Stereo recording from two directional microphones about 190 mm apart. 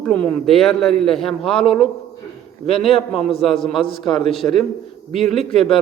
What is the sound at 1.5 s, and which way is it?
Speech, 30° left (ahead or behind).